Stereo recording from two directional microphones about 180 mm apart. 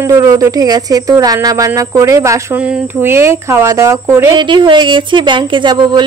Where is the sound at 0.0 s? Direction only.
15° right (ahead or behind).